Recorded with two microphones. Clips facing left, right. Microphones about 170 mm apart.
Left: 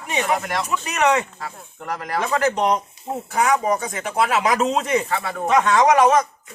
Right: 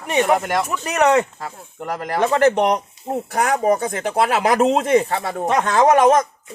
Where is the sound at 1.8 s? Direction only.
45° right (ahead or behind).